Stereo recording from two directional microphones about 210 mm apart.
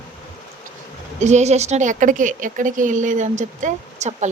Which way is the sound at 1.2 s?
35° right (ahead or behind).